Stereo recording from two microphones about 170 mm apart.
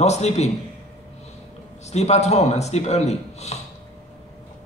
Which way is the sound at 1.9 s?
40° left (ahead or behind).